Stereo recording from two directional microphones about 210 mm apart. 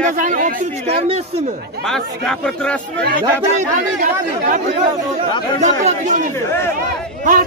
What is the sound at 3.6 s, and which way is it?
Speech, 40° right (ahead or behind).